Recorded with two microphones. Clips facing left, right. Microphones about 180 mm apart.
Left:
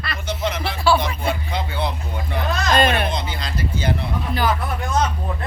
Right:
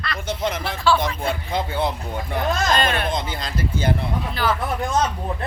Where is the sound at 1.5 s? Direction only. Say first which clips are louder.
Right 2 dB; 45° right (ahead or behind).